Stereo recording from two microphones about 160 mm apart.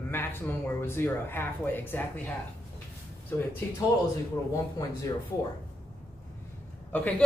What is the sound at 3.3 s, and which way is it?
Speech, 10° left (ahead or behind).